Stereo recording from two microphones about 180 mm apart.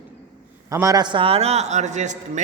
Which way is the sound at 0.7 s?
20° right (ahead or behind).